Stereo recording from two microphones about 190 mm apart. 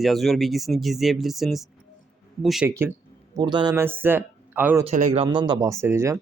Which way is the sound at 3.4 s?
25° right (ahead or behind).